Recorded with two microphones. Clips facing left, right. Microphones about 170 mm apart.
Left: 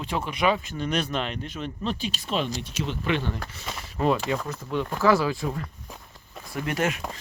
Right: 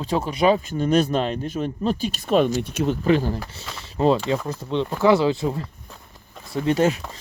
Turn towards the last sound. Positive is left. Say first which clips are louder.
# right 7 dB
turn(degrees=-30)  # may be behind; listen again after turning